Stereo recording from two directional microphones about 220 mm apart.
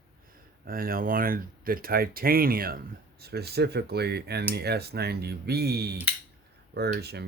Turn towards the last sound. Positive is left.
turn(degrees=-45)  # may be behind; listen again after turning